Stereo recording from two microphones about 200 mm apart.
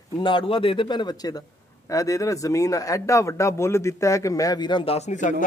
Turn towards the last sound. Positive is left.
turn(degrees=35)  # may be behind; listen again after turning